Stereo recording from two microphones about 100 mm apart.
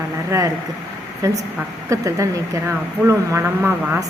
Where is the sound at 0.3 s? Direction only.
30° right (ahead or behind).